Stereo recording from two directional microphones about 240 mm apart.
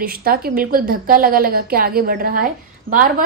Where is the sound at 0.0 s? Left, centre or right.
Right.